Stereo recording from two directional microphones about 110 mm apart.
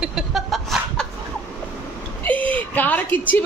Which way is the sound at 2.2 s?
15° left (ahead or behind).